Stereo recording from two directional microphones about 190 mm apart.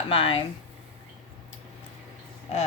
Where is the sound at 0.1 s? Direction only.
30° left (ahead or behind).